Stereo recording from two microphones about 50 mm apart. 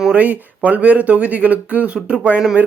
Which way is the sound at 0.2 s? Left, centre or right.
Right.